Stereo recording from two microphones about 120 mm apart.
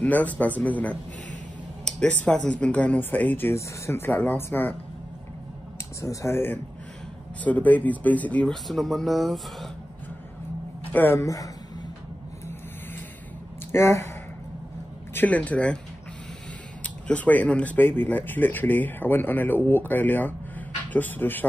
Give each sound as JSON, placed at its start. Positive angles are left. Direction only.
{"t": 0.0, "sound": "speech", "side_deg": 10}
{"t": 5.9, "sound": "speech", "side_deg": 25}
{"t": 8.6, "sound": "speech", "side_deg": 0}
{"t": 10.9, "sound": "a woman's voice", "side_deg": 15}
{"t": 11.1, "sound": "speech", "side_deg": 30}
{"t": 13.7, "sound": "speech", "side_deg": 25}
{"t": 15.1, "sound": "speech", "side_deg": 10}
{"t": 16.8, "sound": "speech", "side_deg": 10}